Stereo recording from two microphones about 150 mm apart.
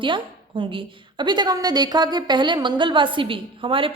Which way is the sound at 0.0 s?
35° right (ahead or behind).